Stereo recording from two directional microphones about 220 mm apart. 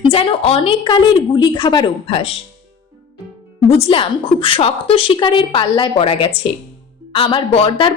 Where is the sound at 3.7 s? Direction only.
25° left (ahead or behind).